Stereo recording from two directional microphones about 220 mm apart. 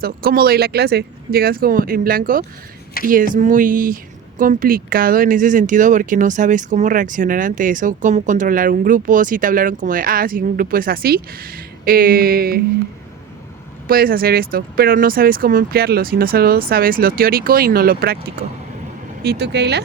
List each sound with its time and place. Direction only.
0.0 s speech: 45° right (ahead or behind)
13.8 s speech: 40° right (ahead or behind)
19.2 s speech: 50° right (ahead or behind)